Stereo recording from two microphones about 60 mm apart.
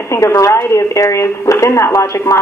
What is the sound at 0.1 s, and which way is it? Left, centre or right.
A woman's voice, left.